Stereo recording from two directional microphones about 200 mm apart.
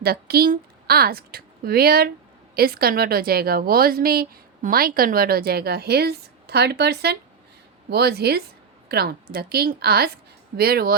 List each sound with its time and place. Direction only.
0.0 s a woman's voice: 50° right (ahead or behind)